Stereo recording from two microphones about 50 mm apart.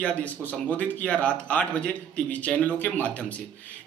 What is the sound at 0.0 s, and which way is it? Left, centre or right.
A man's voice, left.